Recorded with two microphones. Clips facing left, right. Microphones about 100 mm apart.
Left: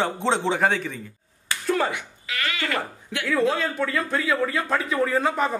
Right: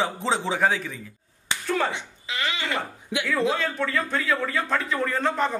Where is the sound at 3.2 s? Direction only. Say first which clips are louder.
Left 2 dB; centre (ahead or behind).